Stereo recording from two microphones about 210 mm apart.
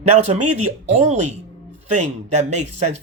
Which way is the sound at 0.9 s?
30° right (ahead or behind).